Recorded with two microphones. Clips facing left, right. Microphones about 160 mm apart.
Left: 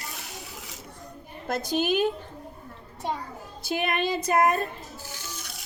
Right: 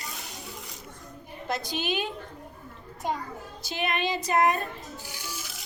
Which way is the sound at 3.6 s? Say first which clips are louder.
Left 3 dB; 50° left (ahead or behind).